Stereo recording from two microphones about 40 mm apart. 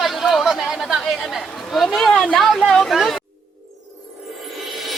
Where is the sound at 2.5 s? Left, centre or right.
Centre.